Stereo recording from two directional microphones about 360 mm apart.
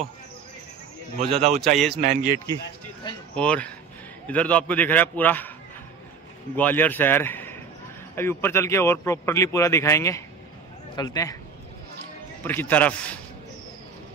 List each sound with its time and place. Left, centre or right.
1.2 s a man's voice: centre
2.5 s a man's voice: centre
6.5 s a man's voice: centre
12.4 s a man's voice: centre